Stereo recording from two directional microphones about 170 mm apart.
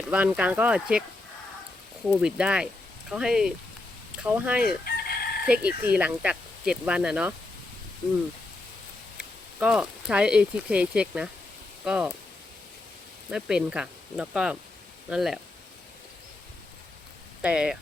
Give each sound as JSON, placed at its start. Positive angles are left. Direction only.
{"t": 0.1, "sound": "speech", "side_deg": -5}
{"t": 2.2, "sound": "speech", "side_deg": -5}
{"t": 4.6, "sound": "chicken", "side_deg": 65}
{"t": 5.5, "sound": "speech", "side_deg": -10}
{"t": 9.1, "sound": "speech", "side_deg": -5}
{"t": 13.3, "sound": "speech", "side_deg": -5}
{"t": 17.4, "sound": "speech", "side_deg": -5}